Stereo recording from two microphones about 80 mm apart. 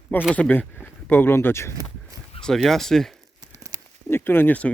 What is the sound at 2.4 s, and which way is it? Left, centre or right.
Speech, centre.